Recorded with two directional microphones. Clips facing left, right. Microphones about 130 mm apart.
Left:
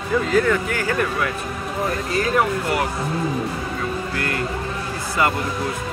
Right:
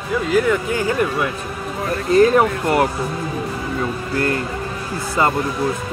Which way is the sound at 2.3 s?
35° right (ahead or behind).